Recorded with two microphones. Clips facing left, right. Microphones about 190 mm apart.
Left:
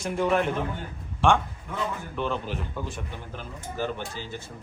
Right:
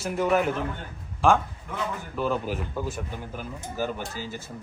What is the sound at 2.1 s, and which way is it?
A man's voice, 5° right (ahead or behind).